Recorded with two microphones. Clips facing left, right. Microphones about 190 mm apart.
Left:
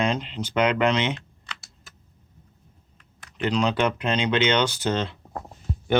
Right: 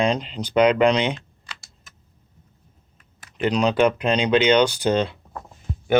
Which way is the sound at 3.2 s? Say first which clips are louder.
Right 3 dB; 15° right (ahead or behind).